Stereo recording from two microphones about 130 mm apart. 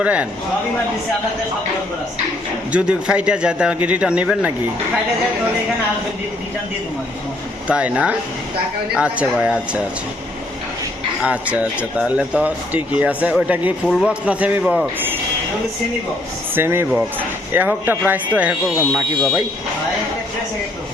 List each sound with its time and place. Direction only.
0.0 s speech: 10° right (ahead or behind)
2.7 s speech: 10° right (ahead or behind)
7.7 s speech: 10° right (ahead or behind)
11.2 s speech: 10° right (ahead or behind)
16.6 s speech: 15° right (ahead or behind)